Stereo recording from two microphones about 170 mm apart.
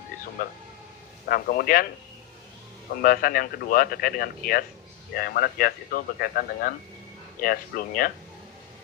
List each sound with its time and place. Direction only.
0.4 s speech: 60° left (ahead or behind)
3.0 s speech: 60° left (ahead or behind)